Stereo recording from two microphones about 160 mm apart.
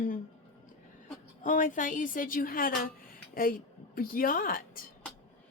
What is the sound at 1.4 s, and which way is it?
Speech, 55° left (ahead or behind).